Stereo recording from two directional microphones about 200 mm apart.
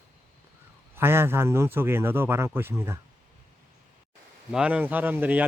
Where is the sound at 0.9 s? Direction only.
10° right (ahead or behind).